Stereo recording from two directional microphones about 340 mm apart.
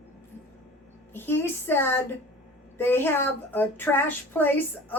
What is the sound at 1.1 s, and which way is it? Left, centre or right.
A woman's voice, centre.